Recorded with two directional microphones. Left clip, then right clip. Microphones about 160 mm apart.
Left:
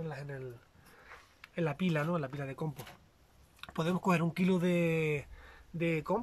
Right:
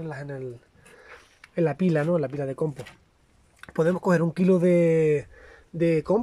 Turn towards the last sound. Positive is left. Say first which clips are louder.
# right 10 dB
turn(degrees=-35)  # may be behind; listen again after turning